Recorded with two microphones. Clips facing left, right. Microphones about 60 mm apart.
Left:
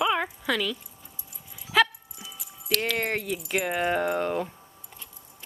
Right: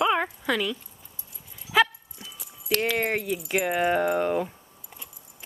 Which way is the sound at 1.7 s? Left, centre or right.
Centre.